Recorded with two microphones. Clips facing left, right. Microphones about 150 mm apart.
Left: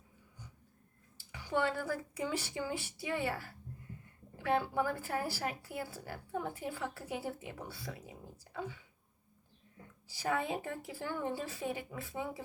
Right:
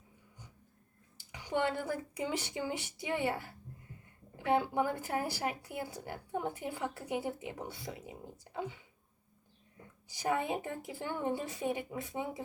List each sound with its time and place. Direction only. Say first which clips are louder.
1.3 s a woman's voice: right 1 dB; 20° right (ahead or behind)
10.1 s a woman's voice: right 2 dB; 15° right (ahead or behind)